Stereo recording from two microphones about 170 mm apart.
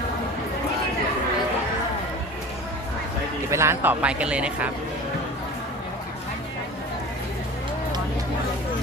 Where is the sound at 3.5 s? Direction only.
15° right (ahead or behind).